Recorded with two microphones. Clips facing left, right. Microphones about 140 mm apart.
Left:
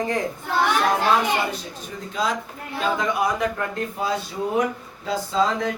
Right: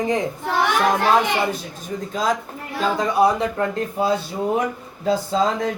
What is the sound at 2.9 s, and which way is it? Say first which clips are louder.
Speech: right 8 dB; 30° right (ahead or behind).